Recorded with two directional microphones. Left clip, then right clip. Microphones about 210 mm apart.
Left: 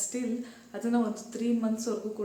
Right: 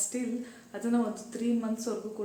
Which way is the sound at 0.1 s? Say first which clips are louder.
Left 1 dB; centre (ahead or behind).